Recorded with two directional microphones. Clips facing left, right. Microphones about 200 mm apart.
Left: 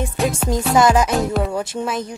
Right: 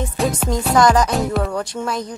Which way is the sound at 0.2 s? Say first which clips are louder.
Even; centre (ahead or behind).